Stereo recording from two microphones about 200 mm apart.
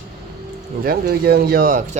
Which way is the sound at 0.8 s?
50° right (ahead or behind).